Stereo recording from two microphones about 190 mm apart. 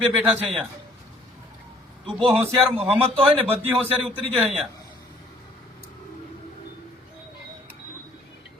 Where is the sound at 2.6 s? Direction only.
30° right (ahead or behind).